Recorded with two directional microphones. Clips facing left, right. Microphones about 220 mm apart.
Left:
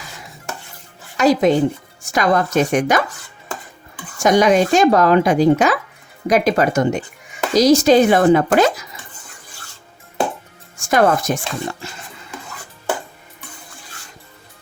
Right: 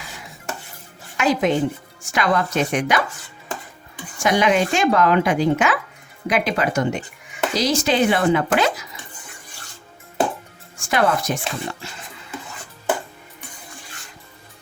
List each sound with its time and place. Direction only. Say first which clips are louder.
1.1 s speech: left 5 dB; 35° left (ahead or behind)
4.2 s speech: left 5 dB; 45° left (ahead or behind)
10.8 s speech: left 5 dB; 45° left (ahead or behind)